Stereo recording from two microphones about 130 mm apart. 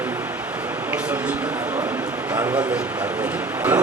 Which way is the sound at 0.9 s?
10° right (ahead or behind).